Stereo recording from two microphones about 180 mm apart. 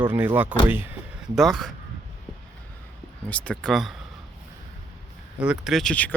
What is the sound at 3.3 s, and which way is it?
Speech, 5° left (ahead or behind).